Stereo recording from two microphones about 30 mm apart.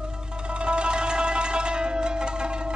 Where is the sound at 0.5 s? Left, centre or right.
Right.